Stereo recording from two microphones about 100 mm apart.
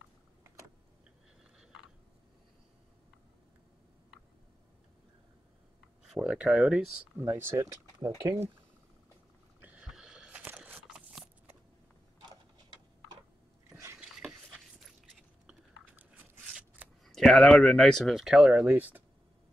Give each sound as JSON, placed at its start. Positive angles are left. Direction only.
{"t": 6.0, "sound": "a sound", "side_deg": 0}
{"t": 6.3, "sound": "speech", "side_deg": -5}
{"t": 7.2, "sound": "speech", "side_deg": -25}
{"t": 9.6, "sound": "a sound", "side_deg": -15}
{"t": 9.8, "sound": "biting", "side_deg": -5}
{"t": 13.7, "sound": "a sound", "side_deg": -30}
{"t": 16.0, "sound": "scissors", "side_deg": -15}
{"t": 17.0, "sound": "speech", "side_deg": 5}
{"t": 18.5, "sound": "speech", "side_deg": -15}